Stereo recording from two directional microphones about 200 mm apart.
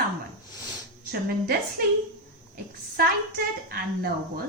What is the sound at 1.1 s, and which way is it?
Speech, 50° right (ahead or behind).